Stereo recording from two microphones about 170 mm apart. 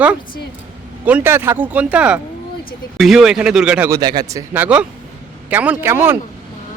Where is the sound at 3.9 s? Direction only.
25° right (ahead or behind).